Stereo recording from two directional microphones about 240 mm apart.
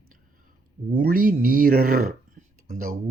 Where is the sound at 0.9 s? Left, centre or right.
Right.